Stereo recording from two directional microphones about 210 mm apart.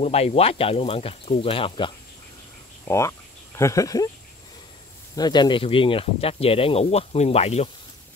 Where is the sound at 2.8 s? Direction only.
15° left (ahead or behind).